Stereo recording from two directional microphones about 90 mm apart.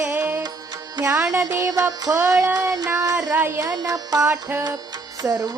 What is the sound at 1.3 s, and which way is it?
Music, 35° right (ahead or behind).